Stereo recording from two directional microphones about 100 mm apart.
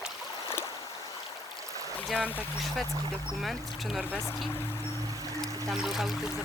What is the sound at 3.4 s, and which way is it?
Speech, centre (ahead or behind).